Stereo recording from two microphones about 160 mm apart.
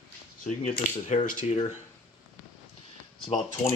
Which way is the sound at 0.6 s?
55° left (ahead or behind).